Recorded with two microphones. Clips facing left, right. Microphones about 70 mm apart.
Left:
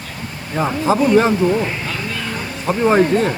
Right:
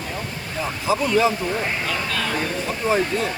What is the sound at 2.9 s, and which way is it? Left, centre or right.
Speech, left.